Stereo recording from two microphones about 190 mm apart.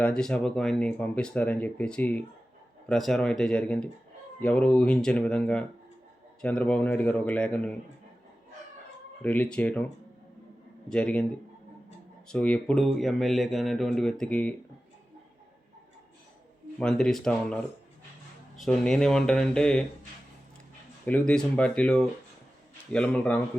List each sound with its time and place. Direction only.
0.2 s speech: 5° left (ahead or behind)
9.2 s speech: 10° left (ahead or behind)
10.8 s speech: 5° left (ahead or behind)
12.3 s speech: 5° left (ahead or behind)
16.7 s speech: 5° left (ahead or behind)
21.0 s speech: 5° left (ahead or behind)